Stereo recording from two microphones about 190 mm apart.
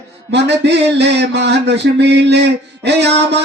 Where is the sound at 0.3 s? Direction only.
65° right (ahead or behind).